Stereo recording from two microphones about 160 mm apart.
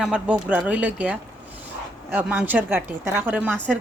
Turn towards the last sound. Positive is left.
turn(degrees=-10)  # may be behind; listen again after turning